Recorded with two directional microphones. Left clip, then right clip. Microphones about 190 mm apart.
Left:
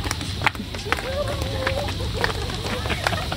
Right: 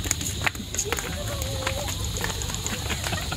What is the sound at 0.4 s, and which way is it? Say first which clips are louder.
Run: left 6 dB; 40° left (ahead or behind).